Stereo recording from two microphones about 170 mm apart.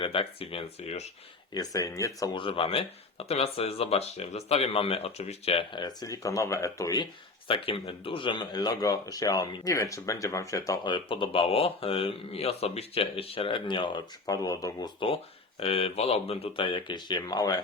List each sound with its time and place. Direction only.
0.0 s speech: 35° left (ahead or behind)
1.5 s speech: 20° left (ahead or behind)
15.6 s speech: 35° left (ahead or behind)